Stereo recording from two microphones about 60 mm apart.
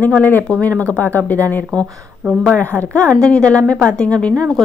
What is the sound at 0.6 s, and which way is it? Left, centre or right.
A woman's voice, left.